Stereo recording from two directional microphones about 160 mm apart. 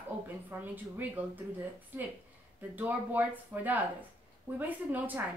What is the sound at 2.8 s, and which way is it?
A woman's voice, 10° right (ahead or behind).